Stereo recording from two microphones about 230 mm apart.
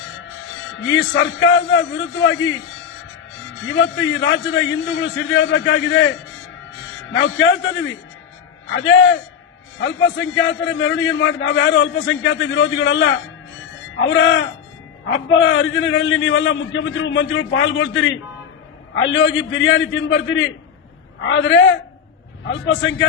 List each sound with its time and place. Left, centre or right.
0.9 s a man's voice: left
3.7 s a man's voice: left